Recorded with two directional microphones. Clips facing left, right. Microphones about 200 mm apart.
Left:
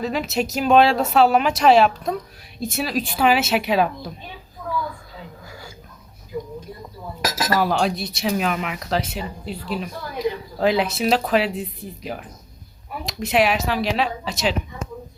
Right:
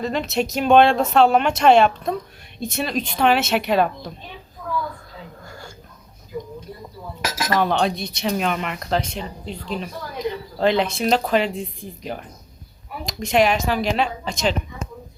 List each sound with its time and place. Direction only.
0.0 s speech: 5° left (ahead or behind)
5.5 s a sound: 5° left (ahead or behind)
7.2 s cutlery: 40° left (ahead or behind)
7.5 s speech: 5° left (ahead or behind)